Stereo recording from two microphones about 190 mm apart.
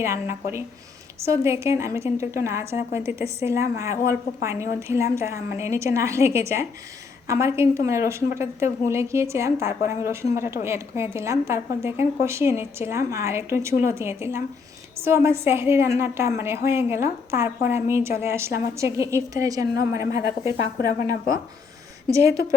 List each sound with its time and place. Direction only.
0.0 s a woman's voice: 15° right (ahead or behind)
22.1 s a woman's voice: 15° right (ahead or behind)